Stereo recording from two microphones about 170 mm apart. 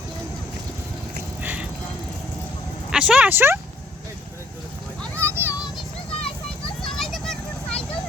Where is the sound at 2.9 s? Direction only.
5° right (ahead or behind).